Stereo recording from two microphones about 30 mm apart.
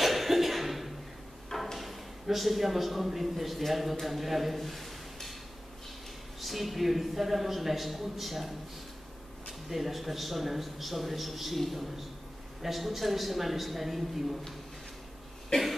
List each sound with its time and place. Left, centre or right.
0.0 s a sound: centre
1.8 s a man's voice: centre
4.6 s a sound: centre
6.4 s a man's voice: centre
12.6 s a man's voice: centre
15.5 s cough: centre